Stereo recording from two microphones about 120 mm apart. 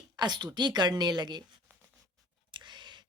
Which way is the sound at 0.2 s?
35° right (ahead or behind).